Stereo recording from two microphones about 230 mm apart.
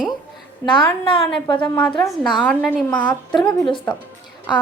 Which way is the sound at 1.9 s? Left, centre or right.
Centre.